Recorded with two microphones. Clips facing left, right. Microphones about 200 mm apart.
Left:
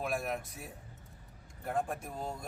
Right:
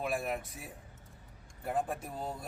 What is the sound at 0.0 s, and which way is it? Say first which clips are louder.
A man's voice: right 1 dB; centre (ahead or behind).